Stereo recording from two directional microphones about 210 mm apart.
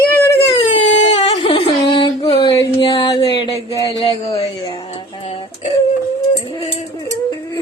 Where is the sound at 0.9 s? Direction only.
35° left (ahead or behind).